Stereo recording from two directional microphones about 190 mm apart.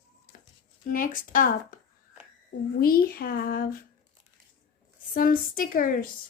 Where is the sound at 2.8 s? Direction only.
50° left (ahead or behind).